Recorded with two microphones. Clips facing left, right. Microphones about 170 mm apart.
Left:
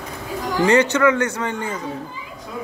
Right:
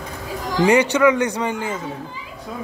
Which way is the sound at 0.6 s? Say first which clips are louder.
Right 1 dB; 10° right (ahead or behind).